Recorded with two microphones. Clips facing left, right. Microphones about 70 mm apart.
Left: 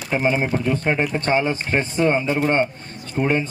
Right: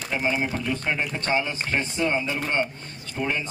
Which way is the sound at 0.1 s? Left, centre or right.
Left.